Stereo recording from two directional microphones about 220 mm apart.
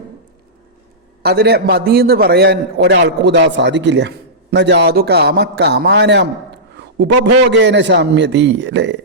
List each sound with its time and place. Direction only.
1.2 s a man's voice: 45° right (ahead or behind)